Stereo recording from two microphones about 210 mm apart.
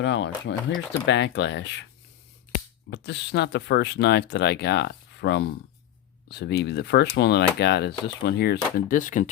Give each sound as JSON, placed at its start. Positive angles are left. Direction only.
{"t": 0.0, "sound": "speech", "side_deg": 60}
{"t": 2.9, "sound": "speech", "side_deg": 55}